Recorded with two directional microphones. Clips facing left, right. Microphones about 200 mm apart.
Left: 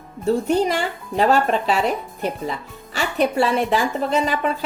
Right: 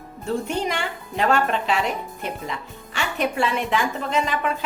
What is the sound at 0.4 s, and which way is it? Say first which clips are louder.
A woman's voice: left 6 dB; 35° left (ahead or behind).